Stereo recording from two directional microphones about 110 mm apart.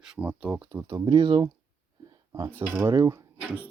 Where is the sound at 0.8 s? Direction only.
40° right (ahead or behind).